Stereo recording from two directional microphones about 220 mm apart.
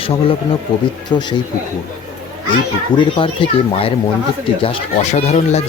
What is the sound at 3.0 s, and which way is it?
Speech, 25° left (ahead or behind).